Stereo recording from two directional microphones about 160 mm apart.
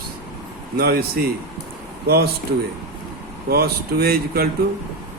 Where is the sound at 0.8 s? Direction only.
80° right.